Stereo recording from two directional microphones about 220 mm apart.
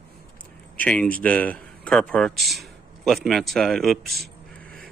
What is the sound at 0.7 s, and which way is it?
Speech, 5° left (ahead or behind).